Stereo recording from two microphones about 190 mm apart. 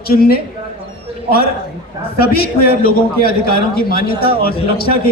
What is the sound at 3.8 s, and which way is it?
A man's voice, 50° left (ahead or behind).